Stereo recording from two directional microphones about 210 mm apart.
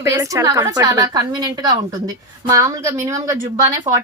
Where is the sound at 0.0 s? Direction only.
15° right (ahead or behind).